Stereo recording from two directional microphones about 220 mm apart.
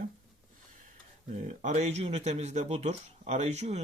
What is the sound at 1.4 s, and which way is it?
Speech, 35° right (ahead or behind).